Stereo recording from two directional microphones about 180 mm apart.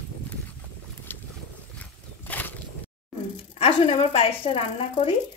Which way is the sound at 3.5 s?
35° left (ahead or behind).